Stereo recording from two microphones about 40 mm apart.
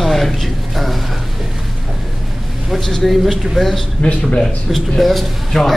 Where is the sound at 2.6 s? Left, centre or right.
Centre.